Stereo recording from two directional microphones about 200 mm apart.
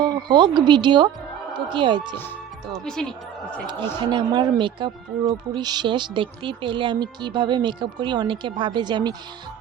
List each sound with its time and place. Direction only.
0.0 s speech: 20° right (ahead or behind)
2.7 s speech: 5° left (ahead or behind)
4.0 s speech: 20° right (ahead or behind)